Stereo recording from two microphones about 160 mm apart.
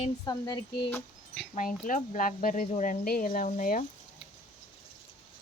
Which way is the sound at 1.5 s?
55° left (ahead or behind).